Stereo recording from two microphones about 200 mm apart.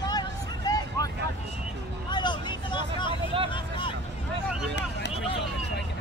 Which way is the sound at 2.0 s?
20° left (ahead or behind).